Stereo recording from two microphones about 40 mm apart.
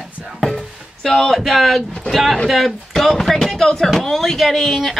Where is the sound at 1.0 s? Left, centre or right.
Centre.